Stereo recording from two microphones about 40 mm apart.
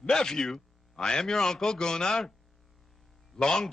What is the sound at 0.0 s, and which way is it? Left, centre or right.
A man's voice, centre.